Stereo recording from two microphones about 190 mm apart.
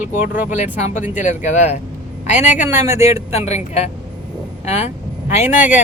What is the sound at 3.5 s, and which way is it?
Speech, 35° left (ahead or behind).